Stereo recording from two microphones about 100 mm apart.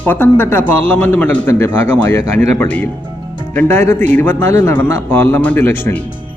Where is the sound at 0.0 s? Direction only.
20° left (ahead or behind).